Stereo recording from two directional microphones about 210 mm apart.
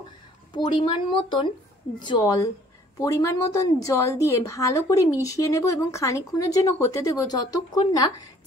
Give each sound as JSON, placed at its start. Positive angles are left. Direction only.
{"t": 0.5, "sound": "a woman's voice", "side_deg": 20}